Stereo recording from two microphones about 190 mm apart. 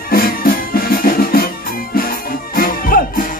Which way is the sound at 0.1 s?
50° left (ahead or behind).